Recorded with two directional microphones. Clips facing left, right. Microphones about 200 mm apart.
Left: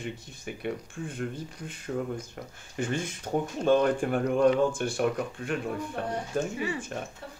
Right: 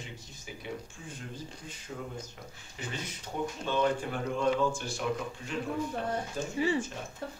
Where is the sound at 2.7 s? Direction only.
50° left (ahead or behind).